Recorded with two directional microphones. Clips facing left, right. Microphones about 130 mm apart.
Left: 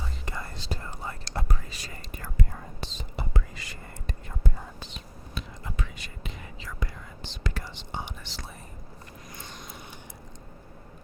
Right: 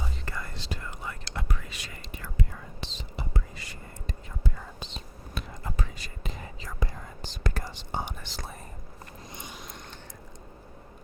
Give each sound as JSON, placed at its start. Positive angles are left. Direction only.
{"t": 0.3, "sound": "whispering", "side_deg": 25}
{"t": 3.3, "sound": "whispering", "side_deg": 90}
{"t": 5.3, "sound": "whispering", "side_deg": -50}
{"t": 5.7, "sound": "whispering", "side_deg": -35}
{"t": 9.5, "sound": "a sound", "side_deg": 0}